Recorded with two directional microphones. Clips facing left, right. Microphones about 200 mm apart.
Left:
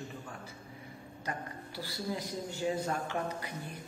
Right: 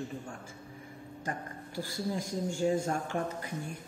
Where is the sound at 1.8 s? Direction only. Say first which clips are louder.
Right 3 dB; 45° right (ahead or behind).